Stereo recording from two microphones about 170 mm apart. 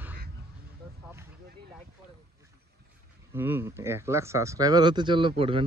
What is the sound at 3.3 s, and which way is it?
Speech, 15° right (ahead or behind).